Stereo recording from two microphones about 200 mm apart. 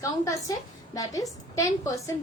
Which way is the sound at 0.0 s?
15° left (ahead or behind).